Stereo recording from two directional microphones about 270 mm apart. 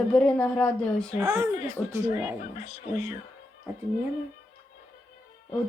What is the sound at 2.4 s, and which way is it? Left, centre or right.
Speech, left.